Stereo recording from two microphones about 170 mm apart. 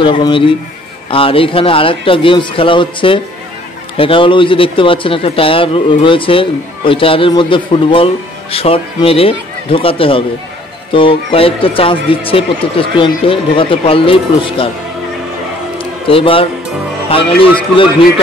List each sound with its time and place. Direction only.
0.0 s speech: 30° left (ahead or behind)
15.8 s music: 30° left (ahead or behind)
17.1 s speech: 30° left (ahead or behind)